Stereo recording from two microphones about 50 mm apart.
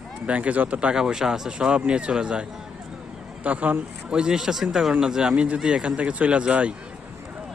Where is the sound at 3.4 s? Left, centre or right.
Right.